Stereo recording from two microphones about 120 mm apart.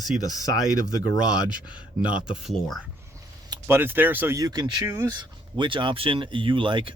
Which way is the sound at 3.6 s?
20° right (ahead or behind).